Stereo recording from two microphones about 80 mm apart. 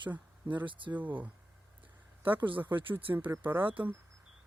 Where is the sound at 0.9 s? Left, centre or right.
Right.